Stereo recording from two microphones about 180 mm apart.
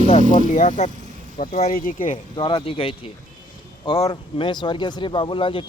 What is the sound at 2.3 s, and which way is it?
Speech, 25° left (ahead or behind).